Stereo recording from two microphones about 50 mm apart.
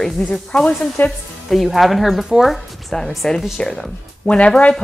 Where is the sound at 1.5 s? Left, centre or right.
Centre.